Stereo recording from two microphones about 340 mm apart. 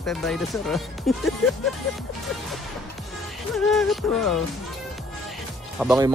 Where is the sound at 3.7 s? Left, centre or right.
Centre.